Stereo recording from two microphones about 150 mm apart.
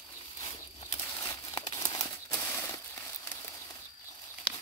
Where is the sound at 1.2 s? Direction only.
25° left (ahead or behind).